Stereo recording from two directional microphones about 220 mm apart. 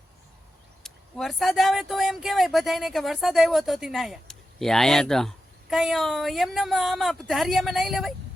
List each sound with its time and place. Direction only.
0.8 s speech: centre (ahead or behind)